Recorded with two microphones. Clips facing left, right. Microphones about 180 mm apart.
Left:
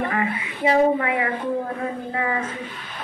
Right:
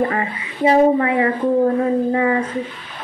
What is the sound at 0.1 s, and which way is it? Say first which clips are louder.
Speech: right 1 dB; 35° right (ahead or behind).